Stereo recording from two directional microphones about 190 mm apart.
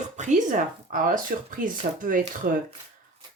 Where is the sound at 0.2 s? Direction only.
40° right (ahead or behind).